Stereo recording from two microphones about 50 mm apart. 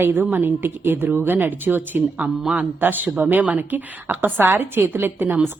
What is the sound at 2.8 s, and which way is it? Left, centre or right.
A woman's voice, right.